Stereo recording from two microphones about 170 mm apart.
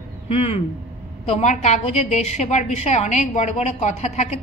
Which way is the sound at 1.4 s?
45° left (ahead or behind).